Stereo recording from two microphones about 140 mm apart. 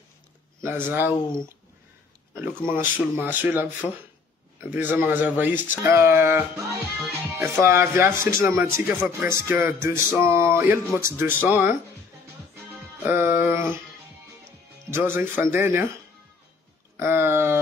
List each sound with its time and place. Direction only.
0.6 s speech: 15° right (ahead or behind)
2.7 s speech: 15° right (ahead or behind)
13.0 s music: 15° right (ahead or behind)
14.9 s speech: 15° right (ahead or behind)
16.9 s speech: 15° right (ahead or behind)